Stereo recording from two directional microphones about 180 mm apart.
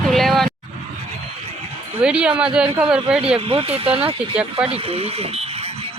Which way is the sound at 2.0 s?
5° right (ahead or behind).